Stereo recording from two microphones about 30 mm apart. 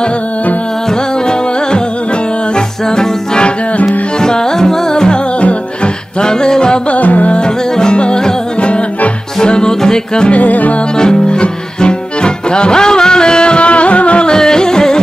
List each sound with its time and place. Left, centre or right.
2.5 s music: left
4.2 s music: centre
6.2 s music: left
6.9 s music: left
7.7 s music: left
9.4 s music: left
10.3 s music: left
11.0 s music: left
14.2 s music: left